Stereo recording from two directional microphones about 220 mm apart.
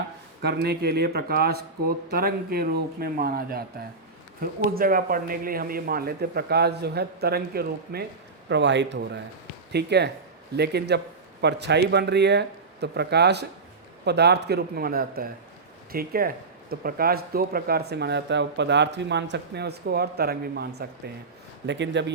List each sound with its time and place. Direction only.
0.4 s speech: 45° right (ahead or behind)